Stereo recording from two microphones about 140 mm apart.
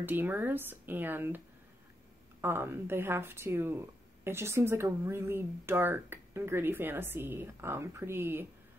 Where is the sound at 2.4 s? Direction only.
15° right (ahead or behind).